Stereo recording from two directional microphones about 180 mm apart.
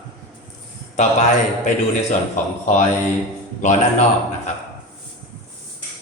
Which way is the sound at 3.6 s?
45° left (ahead or behind).